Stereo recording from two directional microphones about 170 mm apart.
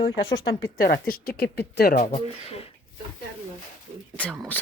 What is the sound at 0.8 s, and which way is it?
Speech, 60° left (ahead or behind).